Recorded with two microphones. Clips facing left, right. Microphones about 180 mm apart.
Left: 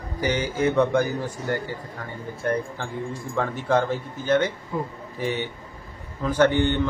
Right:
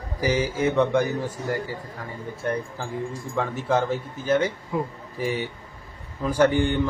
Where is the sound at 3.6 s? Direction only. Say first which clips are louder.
Left 1 dB; 5° right (ahead or behind).